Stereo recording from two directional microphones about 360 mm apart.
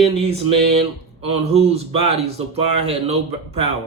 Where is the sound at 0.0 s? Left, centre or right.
Centre.